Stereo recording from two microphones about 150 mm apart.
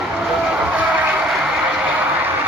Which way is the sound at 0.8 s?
10° right (ahead or behind).